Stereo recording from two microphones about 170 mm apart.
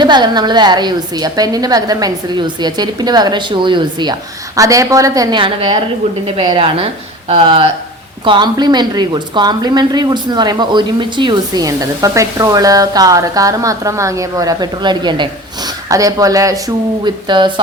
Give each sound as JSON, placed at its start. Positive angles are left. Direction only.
{"t": 0.0, "sound": "a woman's voice", "side_deg": -25}